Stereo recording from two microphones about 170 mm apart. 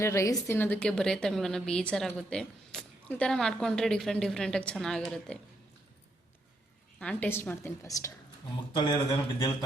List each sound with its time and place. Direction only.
0.0 s a woman's voice: 15° left (ahead or behind)
7.0 s a woman's voice: 5° left (ahead or behind); by 9.6 s 25° left (ahead or behind)